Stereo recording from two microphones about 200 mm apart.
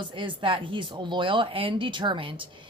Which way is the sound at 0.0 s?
25° right (ahead or behind).